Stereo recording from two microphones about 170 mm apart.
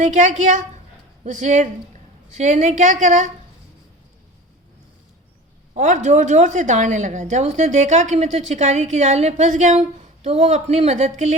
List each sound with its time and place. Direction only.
0.0 s a woman's voice: 45° right (ahead or behind)
5.7 s a woman's voice: 45° right (ahead or behind)